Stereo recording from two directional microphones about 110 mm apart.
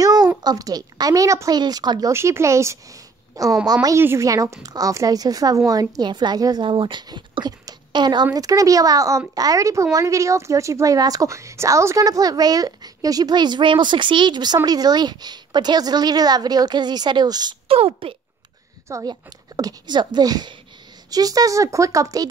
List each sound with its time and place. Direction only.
0.0 s a sound: 35° right (ahead or behind)
0.4 s a woman's voice: 35° right (ahead or behind)
2.1 s a woman's voice: 25° right (ahead or behind)
17.6 s speech: 60° right (ahead or behind)
19.0 s a woman's voice: 35° right (ahead or behind)